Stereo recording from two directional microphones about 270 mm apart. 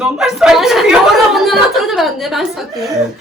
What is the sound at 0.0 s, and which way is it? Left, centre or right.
A woman's voice, centre.